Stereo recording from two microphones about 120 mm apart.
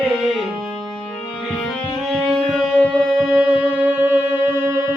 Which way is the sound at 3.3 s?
10° right (ahead or behind).